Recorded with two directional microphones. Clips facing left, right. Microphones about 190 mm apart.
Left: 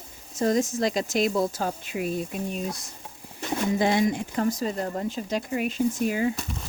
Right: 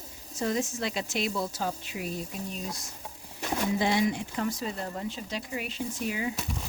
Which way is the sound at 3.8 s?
50° left (ahead or behind).